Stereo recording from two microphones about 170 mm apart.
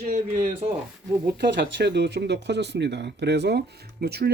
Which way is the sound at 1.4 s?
90° right.